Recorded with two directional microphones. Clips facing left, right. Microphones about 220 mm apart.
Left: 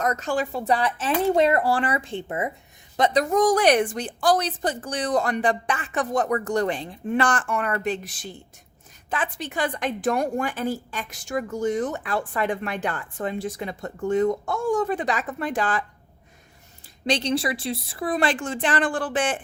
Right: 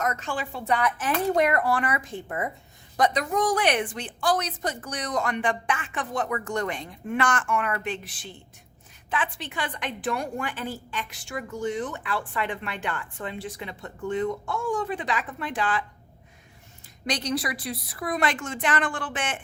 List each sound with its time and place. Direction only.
0.0 s a woman's voice: 40° left (ahead or behind)
17.1 s a woman's voice: 25° left (ahead or behind)